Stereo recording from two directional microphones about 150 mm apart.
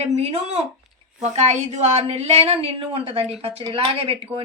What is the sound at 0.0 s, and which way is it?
A woman's voice, 45° right (ahead or behind).